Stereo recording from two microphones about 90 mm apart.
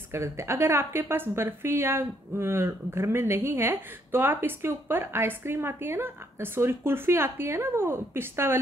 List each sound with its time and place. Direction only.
0.1 s a woman's voice: 30° right (ahead or behind)